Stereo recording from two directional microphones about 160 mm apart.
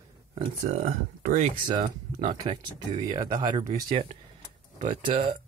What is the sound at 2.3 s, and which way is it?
Speech, 30° right (ahead or behind).